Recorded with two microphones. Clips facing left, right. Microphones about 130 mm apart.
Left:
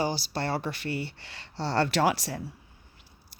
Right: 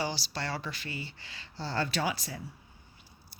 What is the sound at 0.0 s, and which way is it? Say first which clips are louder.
Speech: left 5 dB; 50° left (ahead or behind).